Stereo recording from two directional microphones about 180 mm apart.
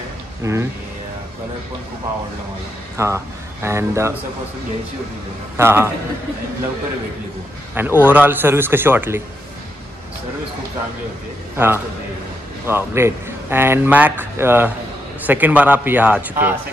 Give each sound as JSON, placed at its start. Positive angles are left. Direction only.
{"t": 0.4, "sound": "speech", "side_deg": -15}
{"t": 3.0, "sound": "a man's voice", "side_deg": -15}
{"t": 5.6, "sound": "a man's voice", "side_deg": -15}
{"t": 7.7, "sound": "a man's voice", "side_deg": -10}
{"t": 11.5, "sound": "a man's voice", "side_deg": -10}